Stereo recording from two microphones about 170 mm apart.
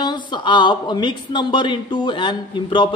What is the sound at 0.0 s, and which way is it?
A woman's voice, 25° left (ahead or behind).